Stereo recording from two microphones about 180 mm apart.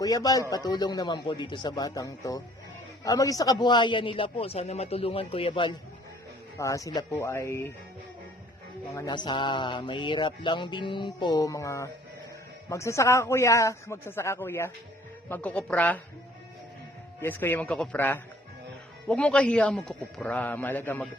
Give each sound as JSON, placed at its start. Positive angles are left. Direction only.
{"t": 0.0, "sound": "speech", "side_deg": 20}
{"t": 0.5, "sound": "a sound", "side_deg": 20}
{"t": 6.6, "sound": "a man's voice", "side_deg": 20}
{"t": 9.0, "sound": "a sound", "side_deg": 25}
{"t": 12.6, "sound": "a man's voice", "side_deg": 15}
{"t": 17.2, "sound": "a man's voice", "side_deg": 10}